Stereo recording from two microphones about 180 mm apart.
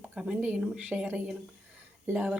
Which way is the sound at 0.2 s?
5° right (ahead or behind).